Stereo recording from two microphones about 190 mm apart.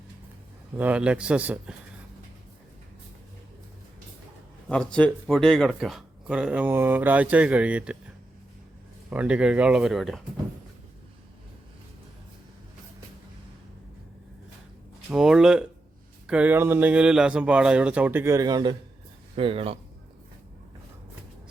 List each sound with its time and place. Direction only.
0.8 s speech: 5° right (ahead or behind)
4.7 s speech: 5° left (ahead or behind)
9.0 s speech: 5° right (ahead or behind)
15.1 s speech: 5° right (ahead or behind); by 19.7 s 30° right (ahead or behind)